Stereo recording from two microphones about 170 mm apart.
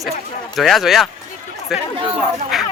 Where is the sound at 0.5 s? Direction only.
Centre (ahead or behind).